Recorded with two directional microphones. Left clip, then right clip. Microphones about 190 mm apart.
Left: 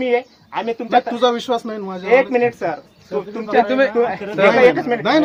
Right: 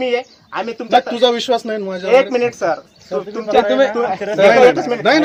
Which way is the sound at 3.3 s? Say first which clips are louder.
Right 2 dB; 10° left (ahead or behind).